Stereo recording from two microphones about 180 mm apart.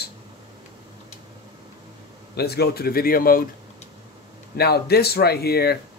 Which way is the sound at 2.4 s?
60° left (ahead or behind).